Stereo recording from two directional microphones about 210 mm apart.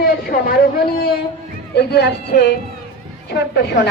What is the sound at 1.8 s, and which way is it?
A man's voice, 50° left (ahead or behind).